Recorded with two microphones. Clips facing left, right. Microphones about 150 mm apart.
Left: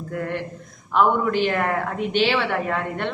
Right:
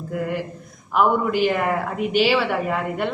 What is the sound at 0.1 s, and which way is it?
A woman's voice, 5° right (ahead or behind).